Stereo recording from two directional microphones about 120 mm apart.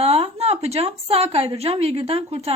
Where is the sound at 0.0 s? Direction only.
55° right (ahead or behind).